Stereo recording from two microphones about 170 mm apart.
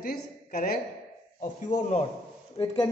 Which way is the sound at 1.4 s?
45° left (ahead or behind).